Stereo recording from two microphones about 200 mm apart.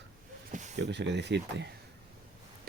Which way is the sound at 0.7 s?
60° right (ahead or behind).